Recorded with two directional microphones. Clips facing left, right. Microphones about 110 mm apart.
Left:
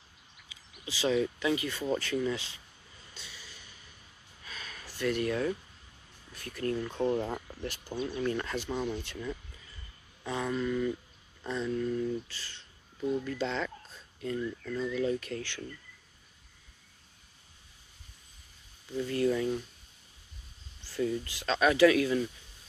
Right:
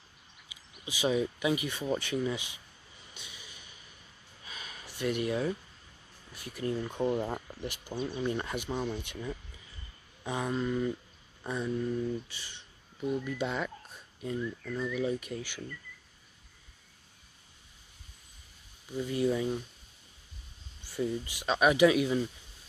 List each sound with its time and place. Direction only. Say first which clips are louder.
0.5 s a sound: even; 15° right (ahead or behind)
6.3 s speech: left 1 dB; 10° right (ahead or behind)
18.9 s speech: left 1 dB; 15° right (ahead or behind)
20.8 s speech: left 1 dB; 15° right (ahead or behind)